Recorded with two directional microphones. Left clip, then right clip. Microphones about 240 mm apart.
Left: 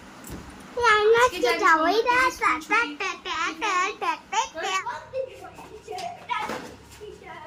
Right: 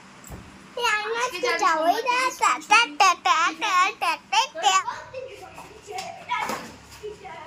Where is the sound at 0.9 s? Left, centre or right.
Left.